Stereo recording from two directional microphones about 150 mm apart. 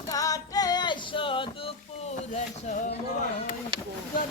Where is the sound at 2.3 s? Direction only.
50° left (ahead or behind).